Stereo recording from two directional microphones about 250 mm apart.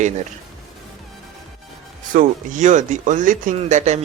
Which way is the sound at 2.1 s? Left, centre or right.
Right.